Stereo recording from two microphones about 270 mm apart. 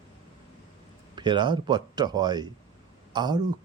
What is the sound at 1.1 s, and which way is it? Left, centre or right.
A man's voice, centre.